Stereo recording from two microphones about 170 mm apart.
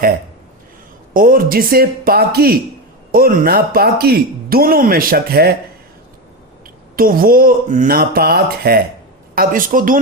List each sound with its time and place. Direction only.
1.1 s speech: 55° right (ahead or behind)
6.9 s speech: 55° right (ahead or behind)